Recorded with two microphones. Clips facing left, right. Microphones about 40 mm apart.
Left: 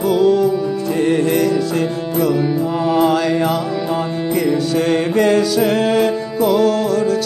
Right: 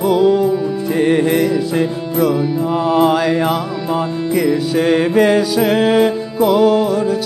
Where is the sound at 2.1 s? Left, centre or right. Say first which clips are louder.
Right 1 dB; centre.